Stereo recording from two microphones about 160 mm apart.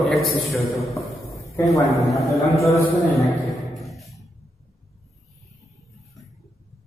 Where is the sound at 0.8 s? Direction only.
Centre (ahead or behind).